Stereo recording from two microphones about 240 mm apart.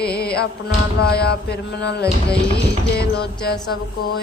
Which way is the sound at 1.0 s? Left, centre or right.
Left.